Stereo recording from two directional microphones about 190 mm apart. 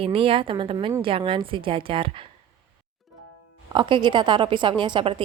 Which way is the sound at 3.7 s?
25° right (ahead or behind).